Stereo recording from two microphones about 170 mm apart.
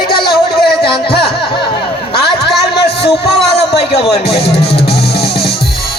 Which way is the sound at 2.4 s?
70° left (ahead or behind).